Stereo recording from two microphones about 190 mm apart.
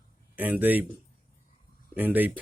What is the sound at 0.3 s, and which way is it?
Speech, 10° right (ahead or behind).